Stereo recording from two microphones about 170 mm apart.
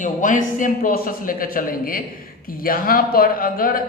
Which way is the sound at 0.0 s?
50° left (ahead or behind).